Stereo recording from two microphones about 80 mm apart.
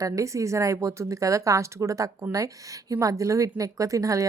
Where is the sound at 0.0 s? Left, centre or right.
Right.